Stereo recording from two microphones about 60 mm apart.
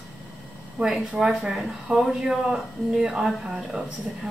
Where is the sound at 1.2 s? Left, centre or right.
Centre.